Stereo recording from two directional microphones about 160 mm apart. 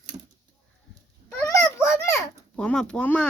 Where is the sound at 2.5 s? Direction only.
5° left (ahead or behind).